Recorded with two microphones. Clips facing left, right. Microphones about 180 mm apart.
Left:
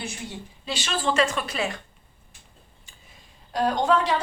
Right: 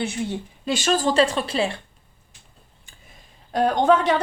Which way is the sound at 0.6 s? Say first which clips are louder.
Right 6 dB; 45° right (ahead or behind).